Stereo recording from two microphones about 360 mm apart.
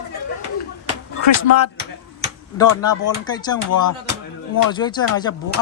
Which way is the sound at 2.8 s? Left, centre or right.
Centre.